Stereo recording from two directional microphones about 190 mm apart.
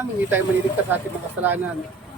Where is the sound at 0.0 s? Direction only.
10° right (ahead or behind).